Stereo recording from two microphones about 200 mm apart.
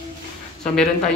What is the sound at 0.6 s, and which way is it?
Speech, 5° left (ahead or behind).